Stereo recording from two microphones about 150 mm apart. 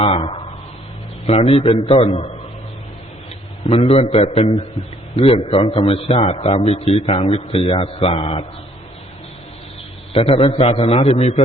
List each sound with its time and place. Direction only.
0.0 s a man's voice: 40° left (ahead or behind)
3.7 s a man's voice: 40° left (ahead or behind)
10.1 s a man's voice: 40° left (ahead or behind)